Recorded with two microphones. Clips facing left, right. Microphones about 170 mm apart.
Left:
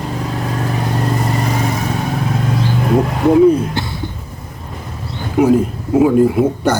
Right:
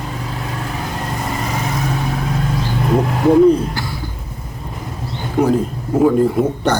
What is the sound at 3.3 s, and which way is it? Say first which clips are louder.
Speech: left 1 dB; 5° left (ahead or behind).